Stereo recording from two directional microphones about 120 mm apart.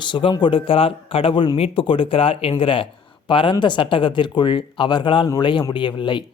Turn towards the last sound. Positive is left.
turn(degrees=40)  # may be behind; listen again after turning